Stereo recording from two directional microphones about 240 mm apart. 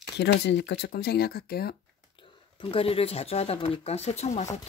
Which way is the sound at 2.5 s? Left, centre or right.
Left.